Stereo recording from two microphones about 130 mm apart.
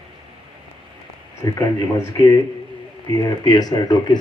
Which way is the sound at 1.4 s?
25° left (ahead or behind).